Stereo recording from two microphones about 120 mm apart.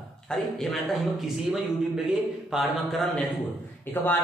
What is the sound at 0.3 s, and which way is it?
Speech, centre (ahead or behind).